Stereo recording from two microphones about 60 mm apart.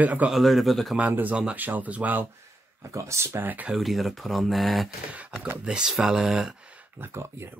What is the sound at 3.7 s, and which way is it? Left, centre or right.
Speech, centre.